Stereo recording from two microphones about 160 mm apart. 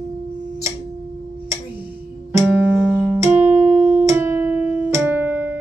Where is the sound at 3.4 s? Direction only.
45° right (ahead or behind).